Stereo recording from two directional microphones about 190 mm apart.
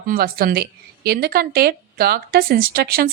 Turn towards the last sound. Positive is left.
turn(degrees=-50)  # may be behind; listen again after turning